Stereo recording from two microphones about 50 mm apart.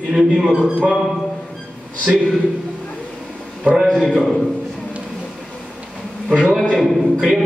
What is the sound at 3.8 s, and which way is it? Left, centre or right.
Speech, centre.